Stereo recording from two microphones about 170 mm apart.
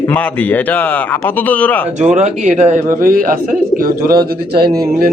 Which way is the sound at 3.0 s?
55° right (ahead or behind).